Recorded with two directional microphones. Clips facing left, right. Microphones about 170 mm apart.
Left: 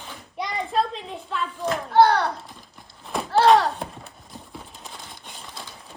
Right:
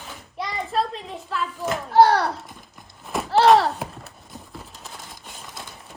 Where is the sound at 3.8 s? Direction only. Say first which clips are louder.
Right 1 dB; 5° right (ahead or behind).